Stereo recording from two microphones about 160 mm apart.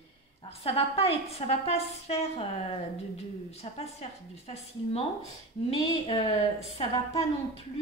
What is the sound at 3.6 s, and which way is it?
A woman's voice, 40° left (ahead or behind).